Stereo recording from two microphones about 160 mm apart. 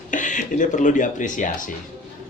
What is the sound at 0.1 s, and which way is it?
Speech, 55° left (ahead or behind).